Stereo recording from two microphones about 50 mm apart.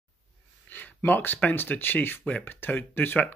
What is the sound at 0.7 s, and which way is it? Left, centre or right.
Speech, left.